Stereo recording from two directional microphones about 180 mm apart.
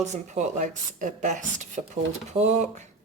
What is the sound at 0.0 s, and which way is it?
Speech, 40° right (ahead or behind).